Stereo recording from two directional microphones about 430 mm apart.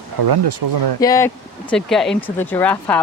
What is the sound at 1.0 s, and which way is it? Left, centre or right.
Speech, centre.